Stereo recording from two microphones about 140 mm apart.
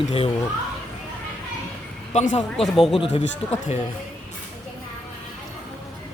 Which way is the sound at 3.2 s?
55° left (ahead or behind).